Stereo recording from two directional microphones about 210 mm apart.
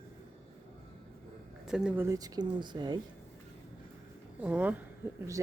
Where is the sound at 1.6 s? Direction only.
5° right (ahead or behind); by 3.0 s 20° right (ahead or behind).